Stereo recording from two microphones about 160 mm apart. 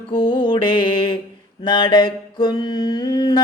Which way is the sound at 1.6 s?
30° left (ahead or behind).